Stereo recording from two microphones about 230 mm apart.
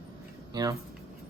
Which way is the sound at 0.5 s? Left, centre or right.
Centre.